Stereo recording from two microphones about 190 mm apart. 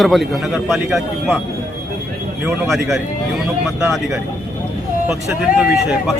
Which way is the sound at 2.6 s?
Centre (ahead or behind).